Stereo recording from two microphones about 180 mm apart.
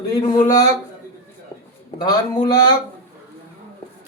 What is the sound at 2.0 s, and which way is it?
Speech, 20° left (ahead or behind).